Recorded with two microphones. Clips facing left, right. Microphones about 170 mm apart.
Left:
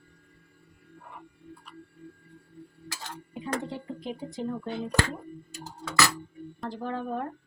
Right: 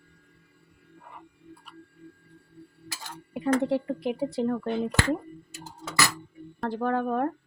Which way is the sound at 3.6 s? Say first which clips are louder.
Right 10 dB; 65° right (ahead or behind).